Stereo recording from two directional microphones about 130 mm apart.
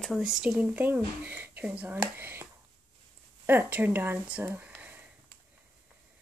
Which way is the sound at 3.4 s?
15° right (ahead or behind).